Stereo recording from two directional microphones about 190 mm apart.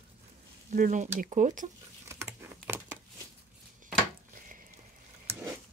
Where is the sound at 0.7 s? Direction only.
40° right (ahead or behind).